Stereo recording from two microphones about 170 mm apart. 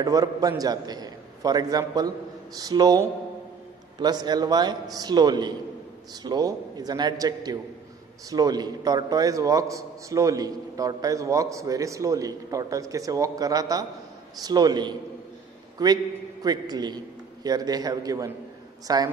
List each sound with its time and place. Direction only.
0.0 s a man's voice: 20° right (ahead or behind)